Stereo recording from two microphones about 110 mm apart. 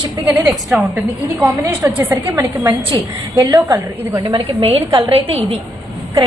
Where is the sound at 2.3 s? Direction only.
30° right (ahead or behind).